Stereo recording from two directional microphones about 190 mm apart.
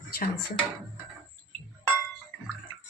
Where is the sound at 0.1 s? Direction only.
50° left (ahead or behind).